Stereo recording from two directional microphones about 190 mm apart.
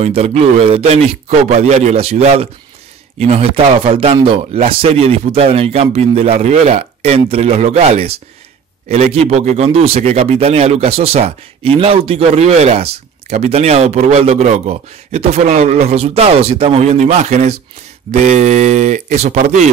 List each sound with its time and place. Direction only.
0.0 s speech: 35° right (ahead or behind)